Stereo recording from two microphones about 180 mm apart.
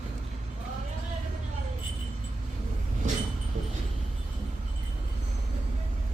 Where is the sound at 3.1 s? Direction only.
45° right (ahead or behind).